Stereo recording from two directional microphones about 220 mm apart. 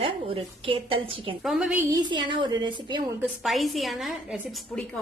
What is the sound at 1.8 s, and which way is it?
A woman's voice, 20° right (ahead or behind).